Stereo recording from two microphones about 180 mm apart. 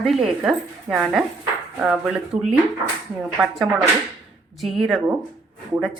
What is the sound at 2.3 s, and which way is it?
Speech, 30° right (ahead or behind).